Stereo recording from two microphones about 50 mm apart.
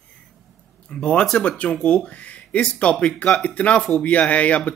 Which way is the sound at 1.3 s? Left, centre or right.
Left.